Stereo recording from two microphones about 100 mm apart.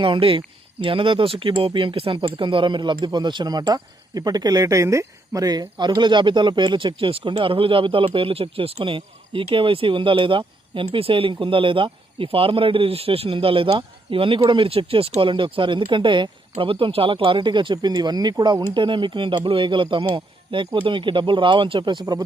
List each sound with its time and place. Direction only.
0.0 s speech: 60° right (ahead or behind)